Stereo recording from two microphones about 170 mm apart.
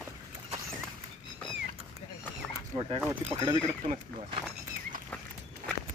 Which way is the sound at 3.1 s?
20° right (ahead or behind).